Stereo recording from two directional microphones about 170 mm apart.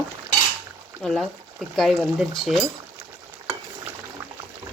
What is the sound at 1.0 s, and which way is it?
Speech, centre (ahead or behind).